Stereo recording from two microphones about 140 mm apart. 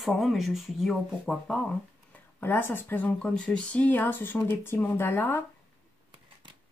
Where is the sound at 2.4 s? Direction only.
15° left (ahead or behind).